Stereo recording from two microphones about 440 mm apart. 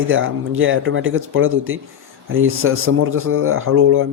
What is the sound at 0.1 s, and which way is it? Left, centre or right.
Speech, right.